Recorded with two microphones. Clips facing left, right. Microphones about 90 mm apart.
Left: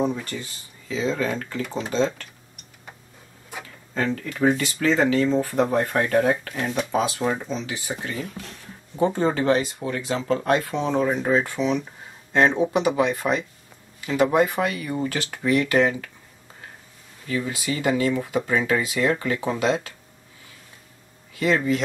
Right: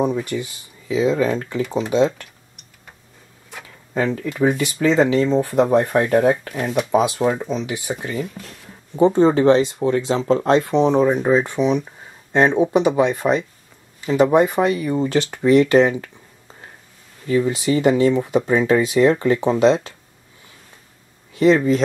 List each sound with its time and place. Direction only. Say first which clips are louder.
0.0 s speech: right 5 dB; 15° right (ahead or behind)
3.9 s speech: right 4 dB; 15° right (ahead or behind)
17.3 s speech: right 9 dB; 25° right (ahead or behind)
21.4 s speech: right 7 dB; 25° right (ahead or behind)